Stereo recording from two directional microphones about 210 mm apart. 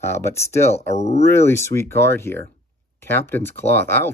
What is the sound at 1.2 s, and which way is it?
Speech, 10° left (ahead or behind).